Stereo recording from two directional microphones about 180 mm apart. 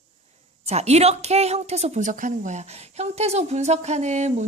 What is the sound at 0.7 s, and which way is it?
A woman's voice, 35° right (ahead or behind).